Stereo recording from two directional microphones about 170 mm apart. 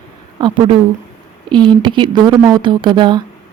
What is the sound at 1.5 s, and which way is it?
Speech, 25° right (ahead or behind).